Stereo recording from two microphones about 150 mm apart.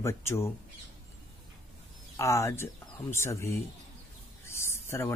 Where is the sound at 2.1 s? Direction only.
20° left (ahead or behind).